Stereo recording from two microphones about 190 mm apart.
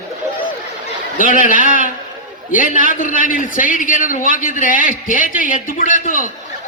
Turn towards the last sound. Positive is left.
turn(degrees=45)  # may be behind; listen again after turning